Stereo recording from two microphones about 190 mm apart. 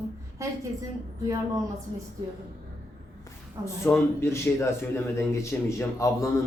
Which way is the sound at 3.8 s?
10° left (ahead or behind).